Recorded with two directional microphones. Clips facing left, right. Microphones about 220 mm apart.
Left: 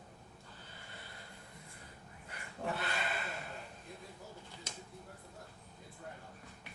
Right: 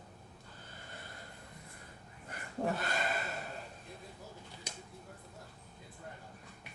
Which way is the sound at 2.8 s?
45° right (ahead or behind).